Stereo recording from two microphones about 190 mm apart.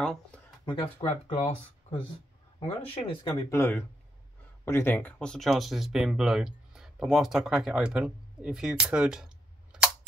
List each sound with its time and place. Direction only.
0.0 s a sound: 5° left (ahead or behind)
0.7 s speech: 25° left (ahead or behind)
3.4 s speech: 15° left (ahead or behind); by 9.8 s 5° right (ahead or behind)